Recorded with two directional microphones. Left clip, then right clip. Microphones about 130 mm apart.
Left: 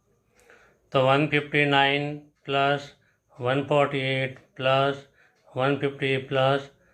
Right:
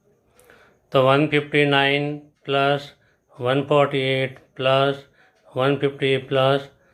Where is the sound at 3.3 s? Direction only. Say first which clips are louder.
Right 4 dB; 35° right (ahead or behind).